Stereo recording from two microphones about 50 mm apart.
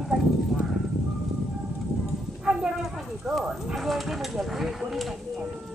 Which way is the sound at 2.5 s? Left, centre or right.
Centre.